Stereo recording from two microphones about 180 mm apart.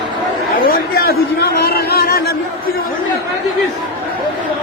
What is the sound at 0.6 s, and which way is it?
Chatter, 55° left (ahead or behind).